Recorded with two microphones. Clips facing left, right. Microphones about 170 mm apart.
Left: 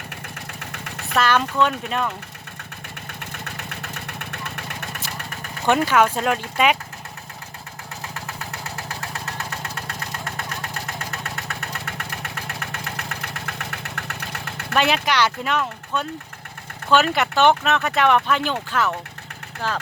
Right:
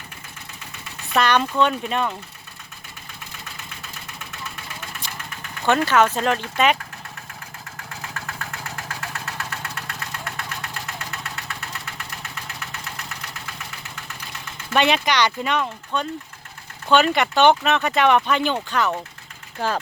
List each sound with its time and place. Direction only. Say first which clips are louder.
0.6 s vehicle: left 4 dB; 65° left (ahead or behind)
1.1 s speech: right 1 dB; centre (ahead or behind)
3.2 s vehicle: left 5 dB; 65° left (ahead or behind)
5.6 s speech: even; 15° left (ahead or behind)
9.5 s vehicle: left 1 dB; 35° left (ahead or behind); by 14.7 s 65° left (ahead or behind)
14.7 s speech: right 1 dB; centre (ahead or behind)